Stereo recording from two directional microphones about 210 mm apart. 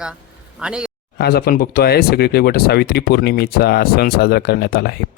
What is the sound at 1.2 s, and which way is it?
Speech, 50° left (ahead or behind).